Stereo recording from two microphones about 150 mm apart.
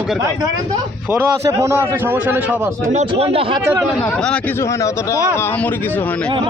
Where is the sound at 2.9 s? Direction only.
45° right (ahead or behind).